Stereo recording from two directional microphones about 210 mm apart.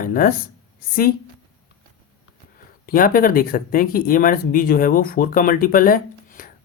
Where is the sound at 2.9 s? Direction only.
40° left (ahead or behind).